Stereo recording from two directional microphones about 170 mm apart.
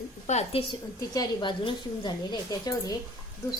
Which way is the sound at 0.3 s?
40° left (ahead or behind).